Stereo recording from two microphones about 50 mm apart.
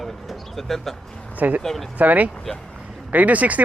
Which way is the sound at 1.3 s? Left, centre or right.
Right.